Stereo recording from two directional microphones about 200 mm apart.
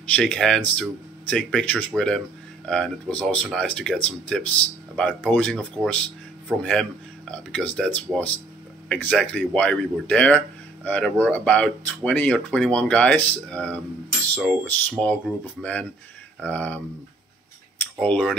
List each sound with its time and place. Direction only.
0.1 s speech: 5° left (ahead or behind)
17.9 s speech: 5° left (ahead or behind)